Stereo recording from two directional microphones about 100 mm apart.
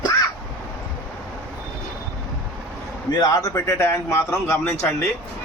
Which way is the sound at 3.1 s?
40° left (ahead or behind).